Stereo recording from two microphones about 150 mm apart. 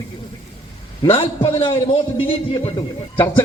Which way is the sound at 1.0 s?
40° left (ahead or behind).